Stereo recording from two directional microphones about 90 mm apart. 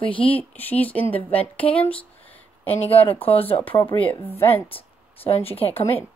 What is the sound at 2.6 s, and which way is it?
Speech, 90° left.